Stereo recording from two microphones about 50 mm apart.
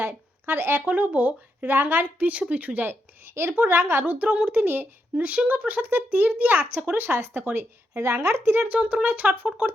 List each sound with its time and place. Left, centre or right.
0.0 s speech: right
0.9 s speech: right
4.6 s speech: right
5.1 s speech: right
8.6 s speech: right